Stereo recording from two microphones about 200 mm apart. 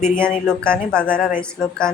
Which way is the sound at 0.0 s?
5° left (ahead or behind).